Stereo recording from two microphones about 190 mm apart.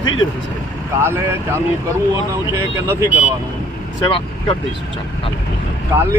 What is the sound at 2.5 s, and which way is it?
Speech, 15° right (ahead or behind).